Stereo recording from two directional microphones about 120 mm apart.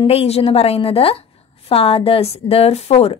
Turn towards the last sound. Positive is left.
turn(degrees=60)  # may be behind; listen again after turning